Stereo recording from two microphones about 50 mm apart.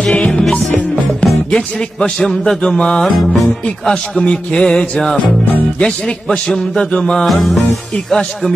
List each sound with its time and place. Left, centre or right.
0.0 s music: centre
3.1 s music: centre
3.8 s music: centre